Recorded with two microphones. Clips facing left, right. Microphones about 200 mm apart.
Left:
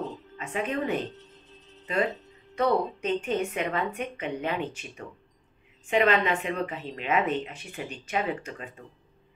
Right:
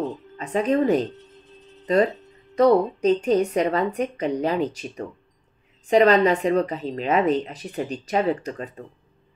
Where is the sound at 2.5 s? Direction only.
40° right (ahead or behind).